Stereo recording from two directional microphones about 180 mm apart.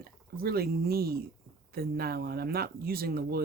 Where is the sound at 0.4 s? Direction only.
60° right (ahead or behind).